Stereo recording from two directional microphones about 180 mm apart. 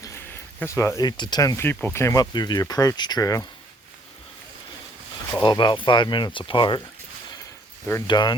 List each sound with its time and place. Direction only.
0.0 s speech: 15° left (ahead or behind)
5.4 s speech: 25° left (ahead or behind)
8.0 s speech: 25° left (ahead or behind)